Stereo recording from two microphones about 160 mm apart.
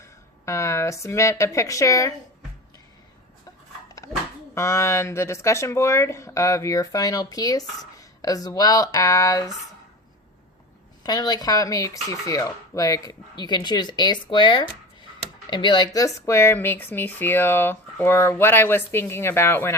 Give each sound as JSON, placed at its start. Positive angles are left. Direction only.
{"t": 0.0, "sound": "speech", "side_deg": 20}
{"t": 4.5, "sound": "speech", "side_deg": 15}
{"t": 11.0, "sound": "speech", "side_deg": 25}